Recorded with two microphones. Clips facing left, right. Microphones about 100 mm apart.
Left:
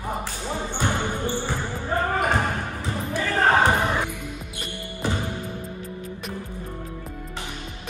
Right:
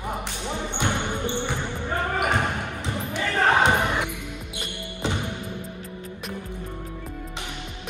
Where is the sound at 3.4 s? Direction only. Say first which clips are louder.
Left 1 dB; 20° right (ahead or behind).